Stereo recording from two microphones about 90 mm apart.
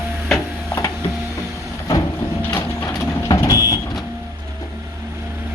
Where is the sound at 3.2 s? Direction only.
40° left (ahead or behind).